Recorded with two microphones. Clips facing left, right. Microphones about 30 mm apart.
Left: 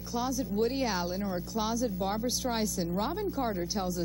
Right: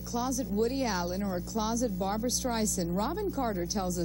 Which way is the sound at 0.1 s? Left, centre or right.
Centre.